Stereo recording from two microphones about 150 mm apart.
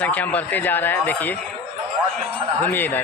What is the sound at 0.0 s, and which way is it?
Speech, 10° left (ahead or behind).